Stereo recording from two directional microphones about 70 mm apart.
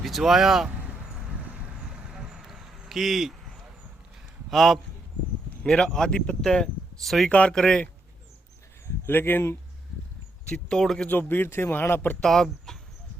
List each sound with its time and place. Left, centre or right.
0.0 s speech: centre
1.9 s vehicle: centre
4.4 s a man's voice: centre
7.3 s speech: centre
9.0 s speech: left
10.5 s speech: centre
11.1 s speech: left
12.2 s speech: centre